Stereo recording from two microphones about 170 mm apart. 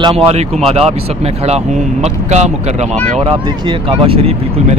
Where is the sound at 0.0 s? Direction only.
35° right (ahead or behind).